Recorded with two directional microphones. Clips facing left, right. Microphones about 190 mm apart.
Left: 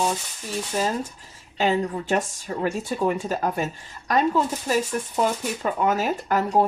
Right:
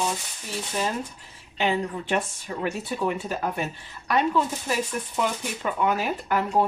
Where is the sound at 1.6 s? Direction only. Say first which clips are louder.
Left 3 dB; 40° left (ahead or behind).